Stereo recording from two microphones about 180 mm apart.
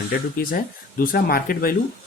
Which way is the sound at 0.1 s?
50° left (ahead or behind).